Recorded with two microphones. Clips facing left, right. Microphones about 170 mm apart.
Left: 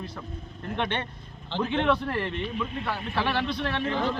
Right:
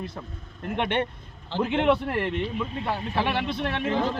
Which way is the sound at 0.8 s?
10° right (ahead or behind).